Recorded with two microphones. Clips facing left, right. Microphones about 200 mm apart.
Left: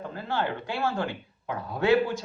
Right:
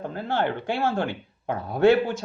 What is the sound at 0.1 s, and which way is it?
Speech, 55° right (ahead or behind).